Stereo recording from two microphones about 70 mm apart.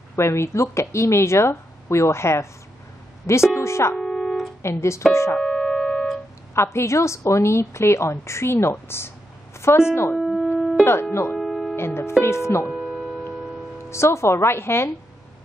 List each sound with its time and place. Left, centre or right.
0.1 s speech: left
3.5 s speech: left
4.0 s music: centre
4.6 s speech: left
5.4 s music: centre
6.5 s a woman's voice: left
9.6 s a sound: left
10.1 s wind instrument: centre
10.8 s speech: left
11.3 s music: centre
11.7 s speech: left
12.8 s mains hum: centre
13.8 s speech: left